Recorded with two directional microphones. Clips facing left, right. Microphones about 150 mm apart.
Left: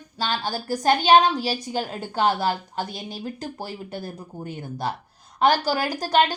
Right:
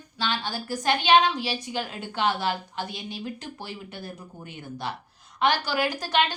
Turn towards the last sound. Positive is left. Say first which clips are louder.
# left 4 dB
turn(degrees=40)  # may be behind; listen again after turning